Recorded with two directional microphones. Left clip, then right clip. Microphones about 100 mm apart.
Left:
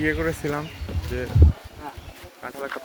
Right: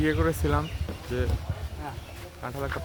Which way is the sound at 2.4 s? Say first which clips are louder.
Left 1 dB; 20° right (ahead or behind).